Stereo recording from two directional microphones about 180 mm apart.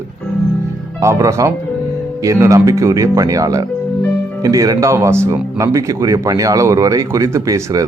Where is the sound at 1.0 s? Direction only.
15° right (ahead or behind).